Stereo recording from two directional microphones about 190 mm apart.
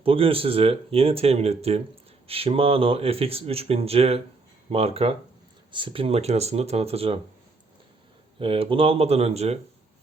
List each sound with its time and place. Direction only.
0.0 s speech: 30° right (ahead or behind)
8.4 s speech: 30° right (ahead or behind)